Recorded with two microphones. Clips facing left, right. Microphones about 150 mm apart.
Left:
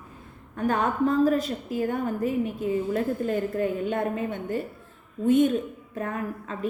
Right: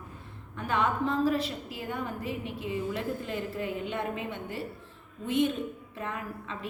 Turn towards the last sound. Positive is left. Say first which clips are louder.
# left 7 dB
turn(degrees=45)  # may be behind; listen again after turning